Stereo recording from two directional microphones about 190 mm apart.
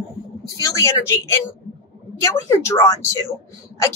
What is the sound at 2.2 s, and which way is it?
Speech, 15° left (ahead or behind).